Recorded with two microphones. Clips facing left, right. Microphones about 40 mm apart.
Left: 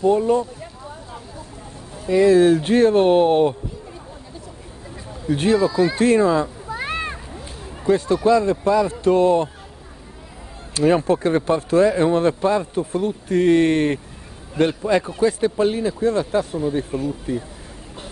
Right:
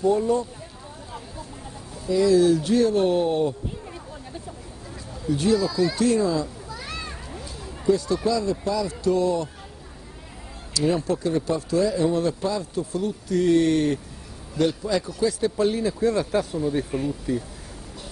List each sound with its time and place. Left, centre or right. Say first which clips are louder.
0.0 s speech: left 4 dB; left
2.0 s speech: left 5 dB; left
5.3 s speech: left 4 dB; left
10.7 s speech: left 6 dB; left
16.9 s speech: left 2 dB; right